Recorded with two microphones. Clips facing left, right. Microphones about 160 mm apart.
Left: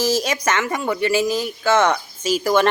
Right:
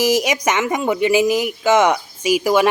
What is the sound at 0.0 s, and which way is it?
Speech, 15° right (ahead or behind).